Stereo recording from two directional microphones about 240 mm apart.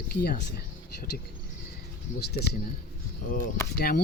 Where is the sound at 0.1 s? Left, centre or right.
Left.